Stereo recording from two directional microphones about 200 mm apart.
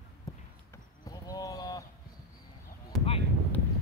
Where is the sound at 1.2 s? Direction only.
20° left (ahead or behind).